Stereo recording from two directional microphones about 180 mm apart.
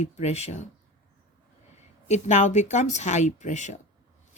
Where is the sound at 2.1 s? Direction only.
40° left (ahead or behind).